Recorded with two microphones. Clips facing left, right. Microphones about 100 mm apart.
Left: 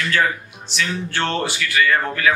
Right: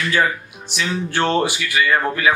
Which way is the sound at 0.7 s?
15° right (ahead or behind).